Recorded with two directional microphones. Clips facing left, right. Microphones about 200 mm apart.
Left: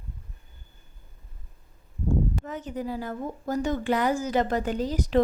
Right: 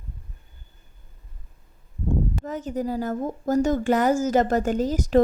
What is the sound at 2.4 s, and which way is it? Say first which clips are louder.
A woman's voice: right 5 dB; 40° right (ahead or behind).